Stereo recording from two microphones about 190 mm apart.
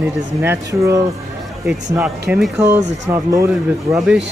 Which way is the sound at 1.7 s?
5° right (ahead or behind).